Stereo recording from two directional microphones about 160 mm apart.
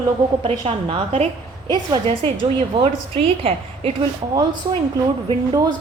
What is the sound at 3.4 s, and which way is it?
Speech, 35° right (ahead or behind).